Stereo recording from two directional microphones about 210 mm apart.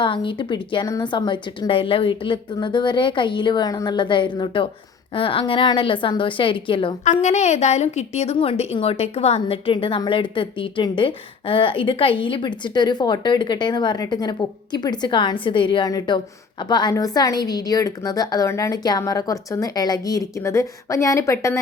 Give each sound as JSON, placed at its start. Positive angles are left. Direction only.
{"t": 0.0, "sound": "a woman's voice", "side_deg": 25}